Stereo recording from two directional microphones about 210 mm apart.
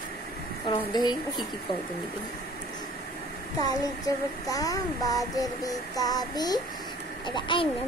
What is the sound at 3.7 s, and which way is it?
Child singing, 15° left (ahead or behind).